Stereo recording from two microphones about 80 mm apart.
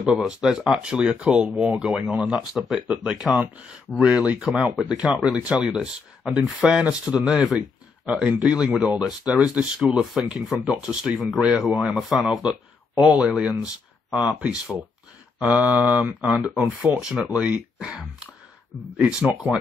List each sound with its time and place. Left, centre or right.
0.0 s speech: centre
16.3 s speech: centre